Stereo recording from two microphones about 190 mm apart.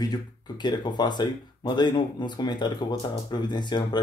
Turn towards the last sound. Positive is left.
turn(degrees=25)  # may be behind; listen again after turning